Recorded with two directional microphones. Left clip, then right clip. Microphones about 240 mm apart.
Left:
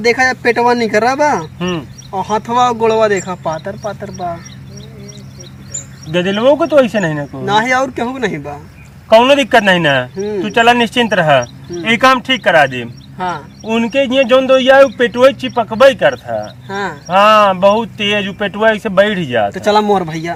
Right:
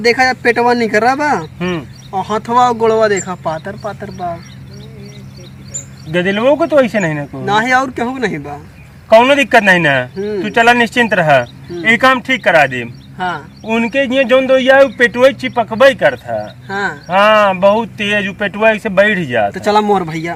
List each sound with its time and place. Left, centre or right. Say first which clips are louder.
0.0 s speech: right 1 dB; centre
1.5 s speech: even; centre
2.1 s speech: right 1 dB; centre
6.1 s speech: left 1 dB; centre
7.4 s speech: even; centre
9.0 s speech: even; centre
10.2 s speech: even; centre
10.4 s speech: even; centre
13.1 s speech: even; centre
13.7 s speech: left 1 dB; centre
16.6 s speech: right 2 dB; centre
17.1 s speech: left 1 dB; centre
19.5 s speech: left 1 dB; centre